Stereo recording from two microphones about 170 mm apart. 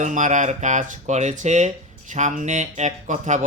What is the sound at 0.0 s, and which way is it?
Speech, 45° right (ahead or behind).